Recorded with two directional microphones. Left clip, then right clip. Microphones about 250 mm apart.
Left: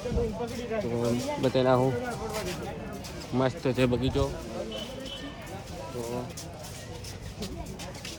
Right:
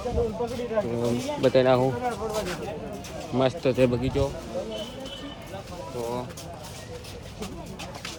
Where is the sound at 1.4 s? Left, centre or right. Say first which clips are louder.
Right 5 dB; centre.